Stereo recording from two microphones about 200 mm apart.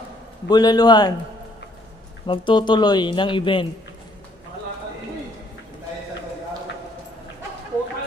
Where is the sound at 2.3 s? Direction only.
25° left (ahead or behind).